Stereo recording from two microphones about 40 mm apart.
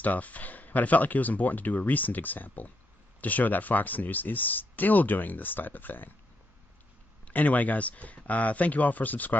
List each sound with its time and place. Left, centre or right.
0.0 s speech: left
7.2 s speech: left